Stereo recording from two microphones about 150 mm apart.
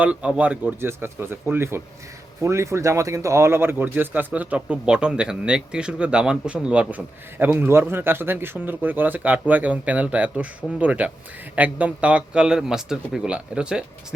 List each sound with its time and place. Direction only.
0.0 s speech: 10° right (ahead or behind)